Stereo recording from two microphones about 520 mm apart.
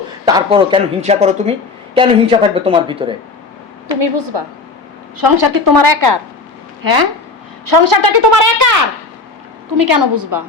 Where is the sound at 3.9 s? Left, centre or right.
Right.